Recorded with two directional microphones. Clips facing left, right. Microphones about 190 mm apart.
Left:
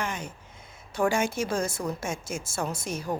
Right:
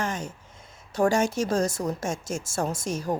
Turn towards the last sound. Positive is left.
turn(degrees=-45)  # may be behind; listen again after turning